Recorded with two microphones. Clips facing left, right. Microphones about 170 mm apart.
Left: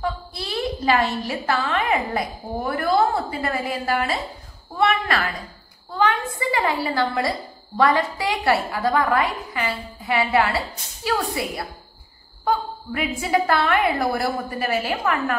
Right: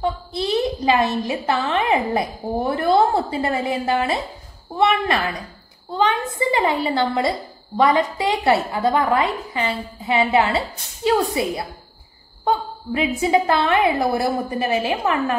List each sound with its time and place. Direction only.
0.0 s a woman's voice: 20° right (ahead or behind)